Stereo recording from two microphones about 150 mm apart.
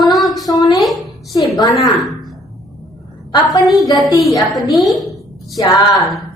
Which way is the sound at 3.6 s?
Centre (ahead or behind).